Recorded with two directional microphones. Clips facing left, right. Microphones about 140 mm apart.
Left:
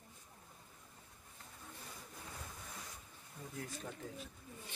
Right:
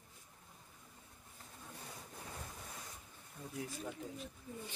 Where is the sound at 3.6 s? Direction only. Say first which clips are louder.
Right 3 dB; 5° right (ahead or behind).